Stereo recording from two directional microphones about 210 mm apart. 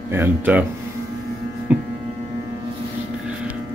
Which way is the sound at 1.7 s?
5° right (ahead or behind).